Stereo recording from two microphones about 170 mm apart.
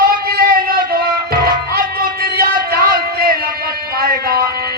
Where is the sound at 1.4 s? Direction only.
60° right (ahead or behind).